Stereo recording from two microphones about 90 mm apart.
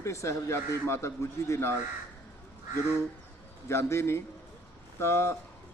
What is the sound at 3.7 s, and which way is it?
A man's voice, 30° left (ahead or behind).